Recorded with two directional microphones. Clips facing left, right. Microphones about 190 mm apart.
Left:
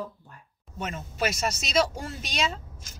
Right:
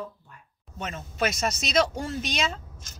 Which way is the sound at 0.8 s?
5° left (ahead or behind).